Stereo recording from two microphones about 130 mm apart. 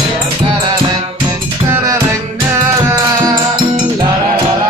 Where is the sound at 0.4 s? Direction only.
35° right (ahead or behind).